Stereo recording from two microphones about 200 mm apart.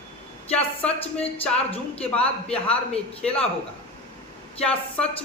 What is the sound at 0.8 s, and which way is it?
Speech, 30° left (ahead or behind).